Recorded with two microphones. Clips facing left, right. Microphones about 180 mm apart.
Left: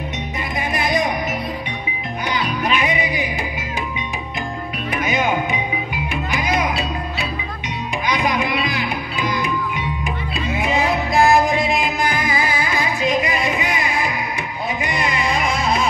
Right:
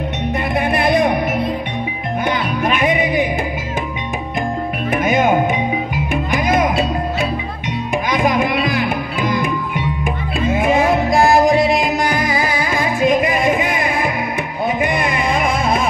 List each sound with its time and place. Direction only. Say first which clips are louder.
0.6 s music: right 5 dB; 60° right (ahead or behind)
2.2 s music: right 3 dB; 50° right (ahead or behind)
4.9 s music: right 6 dB; 50° right (ahead or behind)